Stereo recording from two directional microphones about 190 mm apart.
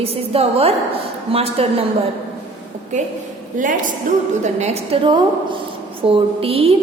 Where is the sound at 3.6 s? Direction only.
45° right (ahead or behind).